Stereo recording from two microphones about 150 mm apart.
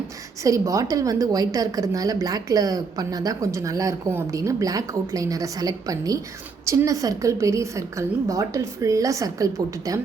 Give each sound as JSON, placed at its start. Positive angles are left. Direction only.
{"t": 0.4, "sound": "a woman's voice", "side_deg": -20}